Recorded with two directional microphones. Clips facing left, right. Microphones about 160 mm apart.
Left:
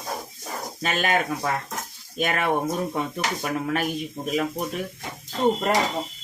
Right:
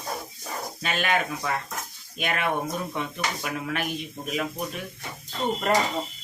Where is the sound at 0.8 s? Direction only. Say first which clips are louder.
Left 2 dB; 40° left (ahead or behind).